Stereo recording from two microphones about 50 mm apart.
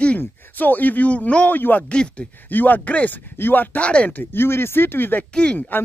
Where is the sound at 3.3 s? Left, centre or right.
Left.